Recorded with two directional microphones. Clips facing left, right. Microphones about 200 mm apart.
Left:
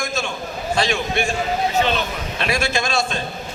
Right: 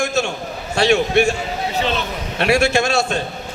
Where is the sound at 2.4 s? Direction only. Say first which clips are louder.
Right 7 dB; 70° right (ahead or behind).